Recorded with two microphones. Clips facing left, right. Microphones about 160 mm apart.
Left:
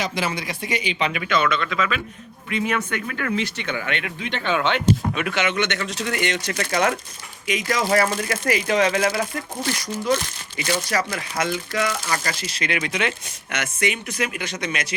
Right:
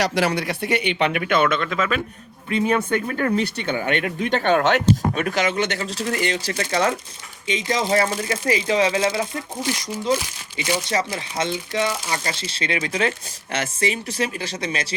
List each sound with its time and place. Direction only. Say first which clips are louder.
0.0 s speech: right 5 dB; 75° right (ahead or behind); by 2.0 s 45° right (ahead or behind)
2.5 s speech: right 4 dB; 30° right (ahead or behind)